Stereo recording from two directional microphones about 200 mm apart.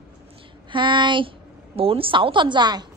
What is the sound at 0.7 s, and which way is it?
A woman's voice, 25° right (ahead or behind).